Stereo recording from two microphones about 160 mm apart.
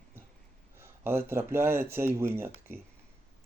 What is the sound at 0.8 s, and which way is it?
Speech, 15° right (ahead or behind).